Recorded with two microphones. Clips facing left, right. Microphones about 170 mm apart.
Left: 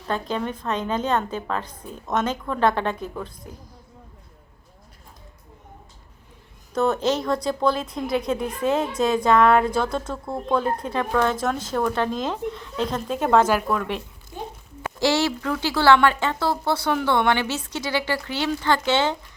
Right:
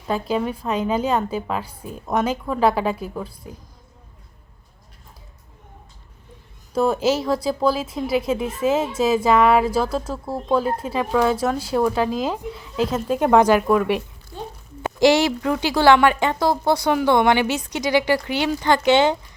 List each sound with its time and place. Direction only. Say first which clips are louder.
0.1 s speech: right 4 dB; 10° right (ahead or behind)
6.7 s speech: right 2 dB; 10° right (ahead or behind)